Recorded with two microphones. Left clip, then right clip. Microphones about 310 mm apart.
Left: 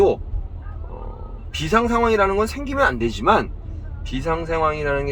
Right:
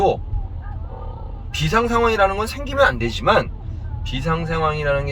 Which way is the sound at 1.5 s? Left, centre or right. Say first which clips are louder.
Right 1 dB; centre.